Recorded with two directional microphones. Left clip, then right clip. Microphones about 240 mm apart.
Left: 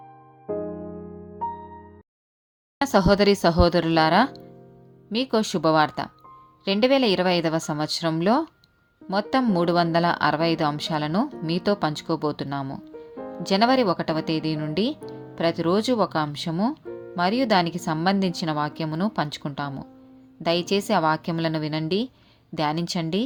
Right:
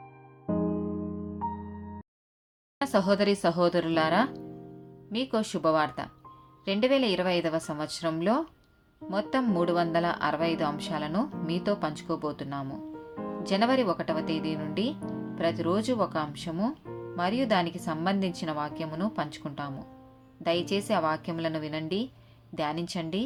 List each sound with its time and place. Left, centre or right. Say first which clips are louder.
2.7 s speech: left 6 dB; left